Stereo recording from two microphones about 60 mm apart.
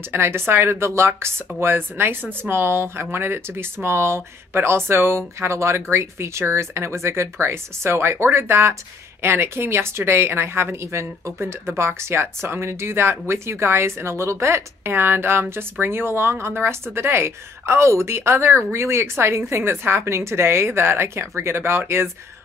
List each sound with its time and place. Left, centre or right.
0.1 s a woman's voice: right
1.6 s a woman's voice: right
15.0 s a woman's voice: right